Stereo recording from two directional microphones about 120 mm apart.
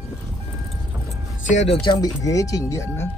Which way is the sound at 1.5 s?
65° left (ahead or behind).